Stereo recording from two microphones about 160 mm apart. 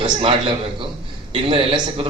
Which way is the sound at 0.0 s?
35° right (ahead or behind).